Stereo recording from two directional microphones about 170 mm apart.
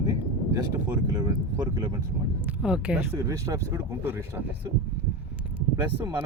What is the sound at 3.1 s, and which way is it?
Speech, 15° right (ahead or behind).